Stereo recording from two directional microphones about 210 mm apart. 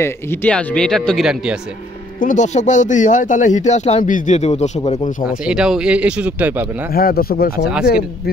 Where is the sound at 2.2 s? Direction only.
35° left (ahead or behind).